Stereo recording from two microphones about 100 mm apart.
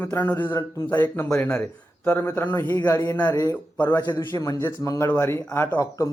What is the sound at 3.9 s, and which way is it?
Speech, 45° left (ahead or behind).